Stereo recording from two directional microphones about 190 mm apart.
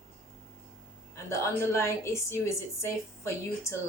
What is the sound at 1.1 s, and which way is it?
A woman's voice, 15° left (ahead or behind).